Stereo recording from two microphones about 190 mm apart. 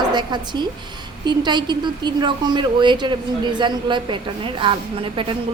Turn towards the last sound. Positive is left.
turn(degrees=-25)  # may be behind; listen again after turning